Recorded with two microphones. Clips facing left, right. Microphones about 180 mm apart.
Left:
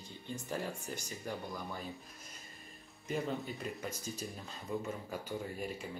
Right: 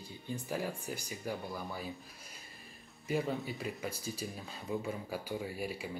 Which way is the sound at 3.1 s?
5° right (ahead or behind).